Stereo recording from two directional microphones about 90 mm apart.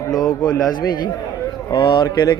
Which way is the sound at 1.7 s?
55° left (ahead or behind).